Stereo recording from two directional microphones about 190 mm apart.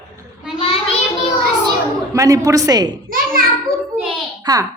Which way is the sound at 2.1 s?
15° right (ahead or behind).